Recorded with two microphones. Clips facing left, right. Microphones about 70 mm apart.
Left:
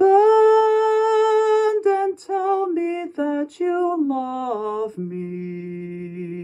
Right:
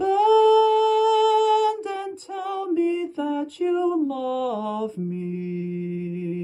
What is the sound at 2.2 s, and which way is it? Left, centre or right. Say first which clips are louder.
Music: left 7 dB; left.